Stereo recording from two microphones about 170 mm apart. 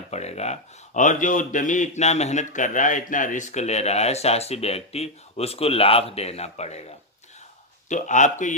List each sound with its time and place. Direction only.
0.1 s speech: 40° left (ahead or behind)
7.9 s a man's voice: 45° left (ahead or behind)